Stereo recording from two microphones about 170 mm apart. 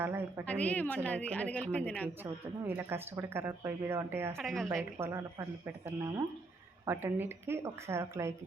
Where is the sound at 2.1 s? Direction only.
10° right (ahead or behind).